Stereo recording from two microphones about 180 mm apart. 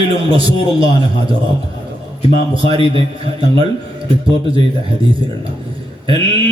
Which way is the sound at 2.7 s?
30° right (ahead or behind).